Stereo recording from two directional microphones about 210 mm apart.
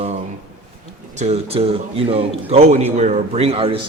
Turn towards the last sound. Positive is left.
turn(degrees=-25)  # may be behind; listen again after turning